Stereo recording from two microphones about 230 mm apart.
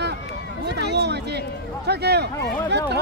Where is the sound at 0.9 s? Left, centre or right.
Right.